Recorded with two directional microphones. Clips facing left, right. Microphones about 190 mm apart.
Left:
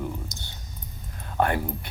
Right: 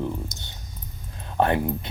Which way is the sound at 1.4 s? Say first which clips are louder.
Right 3 dB; 20° right (ahead or behind).